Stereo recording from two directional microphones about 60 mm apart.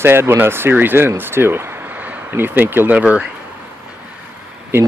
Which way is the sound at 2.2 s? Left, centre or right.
Right.